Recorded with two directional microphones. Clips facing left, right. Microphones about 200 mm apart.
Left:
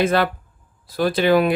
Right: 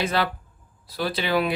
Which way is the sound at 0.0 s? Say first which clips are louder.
Left 6 dB; 50° left (ahead or behind).